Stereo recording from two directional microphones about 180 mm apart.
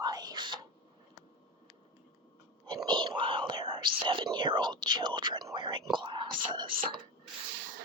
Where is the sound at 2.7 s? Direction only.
25° right (ahead or behind).